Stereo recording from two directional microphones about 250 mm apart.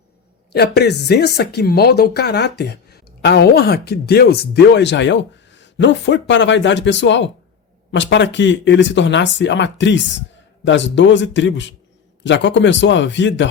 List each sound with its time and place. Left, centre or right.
0.5 s speech: left